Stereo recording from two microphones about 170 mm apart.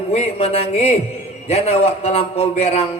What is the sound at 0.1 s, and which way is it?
A man's voice, 40° left (ahead or behind).